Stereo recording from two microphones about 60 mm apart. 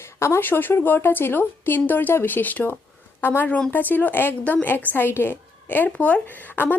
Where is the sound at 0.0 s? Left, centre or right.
Left.